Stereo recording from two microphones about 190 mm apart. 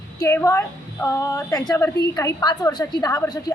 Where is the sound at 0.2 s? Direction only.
15° left (ahead or behind).